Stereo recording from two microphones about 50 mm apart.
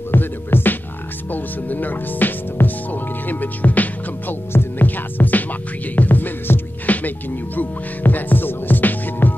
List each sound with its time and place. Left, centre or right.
0.1 s music: left
1.3 s speech: left
4.5 s music: left
4.8 s speech: left